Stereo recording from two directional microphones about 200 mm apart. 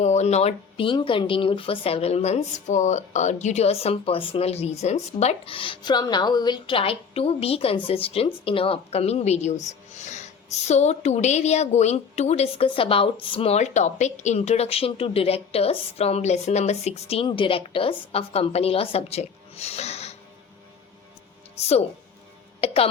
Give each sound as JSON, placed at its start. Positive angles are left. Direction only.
{"t": 0.0, "sound": "speech", "side_deg": 35}
{"t": 21.5, "sound": "a woman's voice", "side_deg": 30}